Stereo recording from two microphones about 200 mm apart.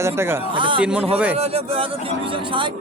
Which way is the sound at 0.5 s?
25° right (ahead or behind).